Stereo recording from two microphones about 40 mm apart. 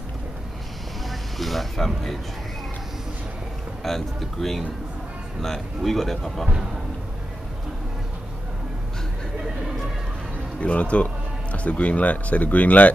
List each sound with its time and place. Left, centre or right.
1.0 s speech: centre
3.8 s speech: centre
5.9 s speech: centre
10.6 s speech: left